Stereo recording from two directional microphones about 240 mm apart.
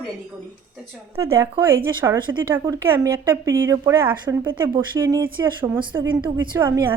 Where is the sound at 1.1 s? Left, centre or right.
Centre.